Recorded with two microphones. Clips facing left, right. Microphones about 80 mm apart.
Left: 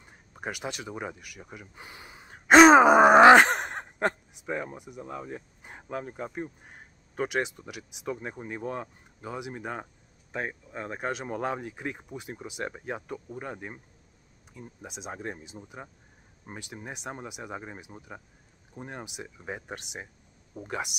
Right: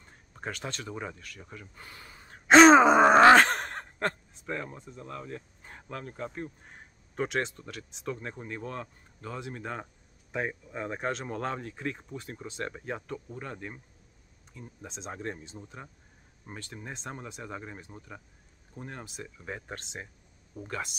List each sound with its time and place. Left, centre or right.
0.0 s speech: centre